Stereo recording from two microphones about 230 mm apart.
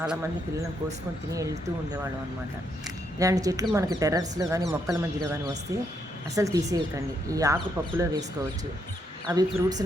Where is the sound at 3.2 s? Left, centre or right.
Centre.